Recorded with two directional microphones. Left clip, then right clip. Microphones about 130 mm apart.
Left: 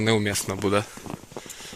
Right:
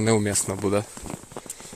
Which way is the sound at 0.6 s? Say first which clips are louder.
Left 1 dB; 20° right (ahead or behind).